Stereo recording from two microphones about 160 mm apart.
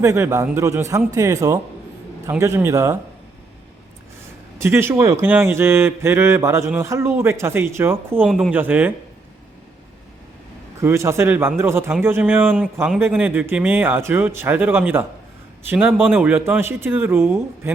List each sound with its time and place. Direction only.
0.0 s a man's voice: 20° right (ahead or behind)
4.6 s a man's voice: 15° right (ahead or behind)
8.2 s a man's voice: centre (ahead or behind)
10.8 s a man's voice: 20° right (ahead or behind)